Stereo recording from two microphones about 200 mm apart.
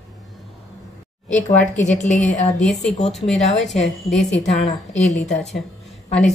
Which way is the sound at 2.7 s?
5° left (ahead or behind).